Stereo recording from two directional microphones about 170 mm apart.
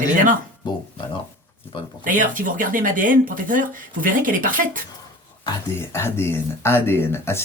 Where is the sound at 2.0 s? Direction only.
50° right (ahead or behind).